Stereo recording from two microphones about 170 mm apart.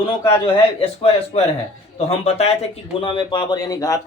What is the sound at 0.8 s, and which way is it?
Speech, 35° left (ahead or behind).